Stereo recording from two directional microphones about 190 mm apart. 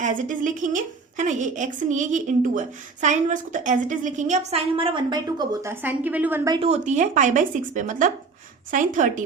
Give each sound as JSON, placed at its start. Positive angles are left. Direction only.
{"t": 0.0, "sound": "a woman's voice", "side_deg": -45}
{"t": 5.8, "sound": "a woman's voice", "side_deg": -10}
{"t": 6.5, "sound": "a woman's voice", "side_deg": -35}